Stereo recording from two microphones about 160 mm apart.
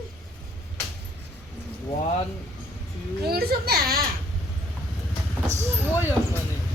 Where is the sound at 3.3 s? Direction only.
75° right (ahead or behind).